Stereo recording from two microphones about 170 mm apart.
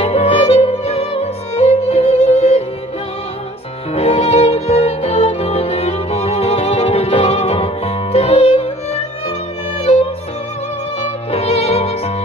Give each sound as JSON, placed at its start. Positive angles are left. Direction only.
{"t": 0.0, "sound": "music", "side_deg": 35}
{"t": 3.9, "sound": "music", "side_deg": 35}
{"t": 11.0, "sound": "music", "side_deg": 35}